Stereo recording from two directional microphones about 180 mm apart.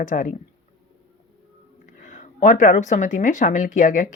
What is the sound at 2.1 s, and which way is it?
Speech, 45° left (ahead or behind).